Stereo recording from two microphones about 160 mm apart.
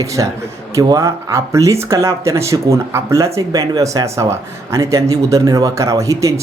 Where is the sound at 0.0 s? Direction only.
20° right (ahead or behind).